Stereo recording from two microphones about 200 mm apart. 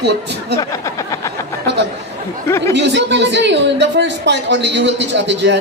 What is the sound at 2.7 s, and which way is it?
A woman's voice, 60° right (ahead or behind).